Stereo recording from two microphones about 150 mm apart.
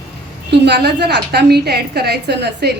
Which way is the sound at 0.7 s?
90° right.